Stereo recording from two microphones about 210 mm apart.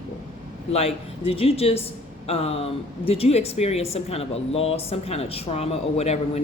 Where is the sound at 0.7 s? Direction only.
30° left (ahead or behind).